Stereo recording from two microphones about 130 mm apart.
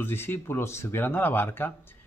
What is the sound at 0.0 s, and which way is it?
Speech, 15° left (ahead or behind).